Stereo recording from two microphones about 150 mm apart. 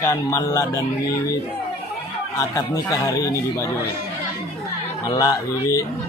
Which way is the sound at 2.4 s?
20° left (ahead or behind).